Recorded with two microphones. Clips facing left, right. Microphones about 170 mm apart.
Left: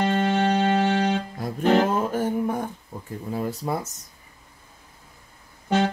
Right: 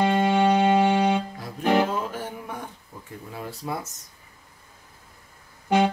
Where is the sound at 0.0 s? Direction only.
15° right (ahead or behind).